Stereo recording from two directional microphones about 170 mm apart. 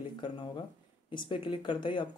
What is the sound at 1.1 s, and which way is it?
Speech, 30° left (ahead or behind).